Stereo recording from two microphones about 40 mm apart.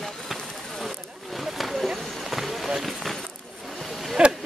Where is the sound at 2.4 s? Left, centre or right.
Centre.